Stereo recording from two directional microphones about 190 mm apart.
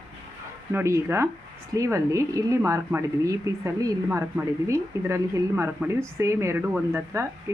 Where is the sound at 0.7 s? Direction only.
15° right (ahead or behind).